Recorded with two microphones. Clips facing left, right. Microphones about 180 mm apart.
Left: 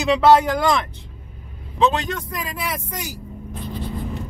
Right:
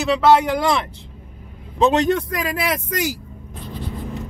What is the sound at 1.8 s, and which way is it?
A man's voice, 55° right (ahead or behind).